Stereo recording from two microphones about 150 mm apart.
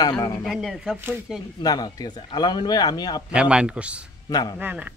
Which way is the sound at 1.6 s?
25° left (ahead or behind).